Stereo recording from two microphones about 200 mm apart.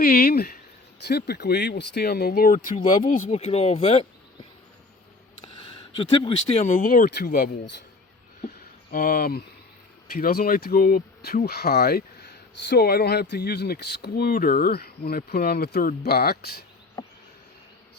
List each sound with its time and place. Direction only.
0.0 s speech: 50° left (ahead or behind); by 4.0 s 30° left (ahead or behind)
5.6 s speech: 25° left (ahead or behind); by 7.5 s 45° left (ahead or behind)
8.4 s a sound: 45° left (ahead or behind)
10.1 s speech: 45° left (ahead or behind)
17.0 s insect: 20° left (ahead or behind)